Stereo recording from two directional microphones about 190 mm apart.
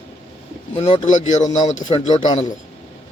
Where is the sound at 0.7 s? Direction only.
40° left (ahead or behind).